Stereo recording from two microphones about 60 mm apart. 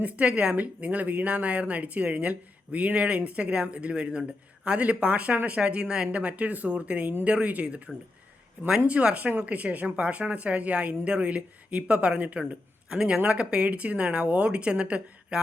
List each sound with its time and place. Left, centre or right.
0.0 s a woman's voice: centre
8.9 s a woman's voice: centre